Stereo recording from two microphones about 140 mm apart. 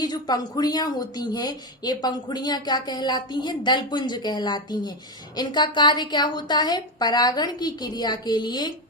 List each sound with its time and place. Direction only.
0.0 s a woman's voice: 30° left (ahead or behind)